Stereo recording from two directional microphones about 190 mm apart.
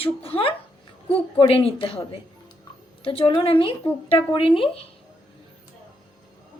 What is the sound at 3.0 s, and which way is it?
A woman's voice, 30° left (ahead or behind).